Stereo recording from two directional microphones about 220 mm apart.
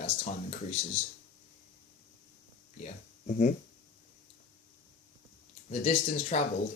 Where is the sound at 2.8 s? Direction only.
35° left (ahead or behind).